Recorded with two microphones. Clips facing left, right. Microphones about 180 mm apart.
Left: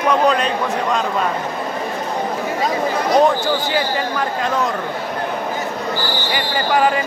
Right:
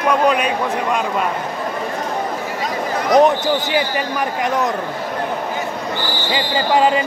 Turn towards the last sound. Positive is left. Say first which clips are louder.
# right 1 dB
turn(degrees=-20)  # may be behind; listen again after turning